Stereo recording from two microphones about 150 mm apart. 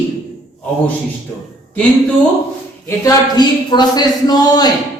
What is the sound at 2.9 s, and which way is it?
Speech, 25° left (ahead or behind).